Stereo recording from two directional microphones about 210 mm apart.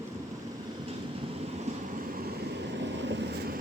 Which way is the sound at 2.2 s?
55° right (ahead or behind).